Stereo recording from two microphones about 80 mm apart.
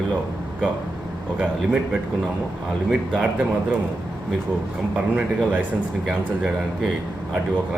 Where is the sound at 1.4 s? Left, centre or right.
Centre.